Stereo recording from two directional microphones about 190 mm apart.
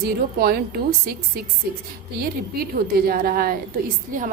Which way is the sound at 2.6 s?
50° right (ahead or behind).